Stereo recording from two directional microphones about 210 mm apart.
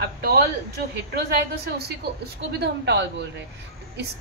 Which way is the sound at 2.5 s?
55° right (ahead or behind).